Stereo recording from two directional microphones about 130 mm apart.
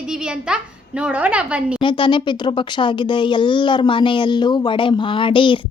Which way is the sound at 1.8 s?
40° left (ahead or behind).